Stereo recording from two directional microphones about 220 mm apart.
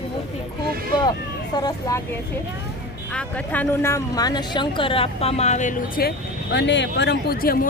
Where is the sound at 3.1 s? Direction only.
5° left (ahead or behind); by 7.7 s 40° left (ahead or behind).